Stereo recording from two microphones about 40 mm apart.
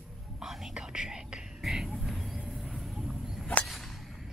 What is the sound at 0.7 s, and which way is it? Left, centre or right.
Whispering, centre.